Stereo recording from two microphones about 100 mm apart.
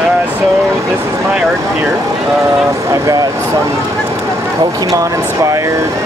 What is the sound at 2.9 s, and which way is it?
Speech, 30° right (ahead or behind).